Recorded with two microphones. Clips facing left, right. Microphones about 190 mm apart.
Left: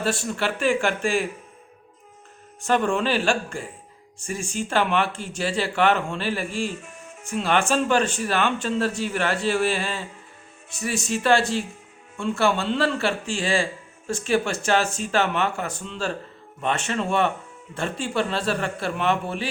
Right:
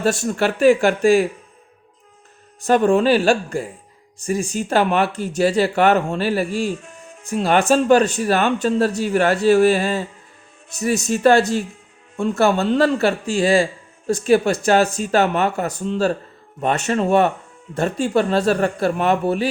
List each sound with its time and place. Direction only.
0.0 s speech: 45° right (ahead or behind)
2.6 s speech: 35° right (ahead or behind)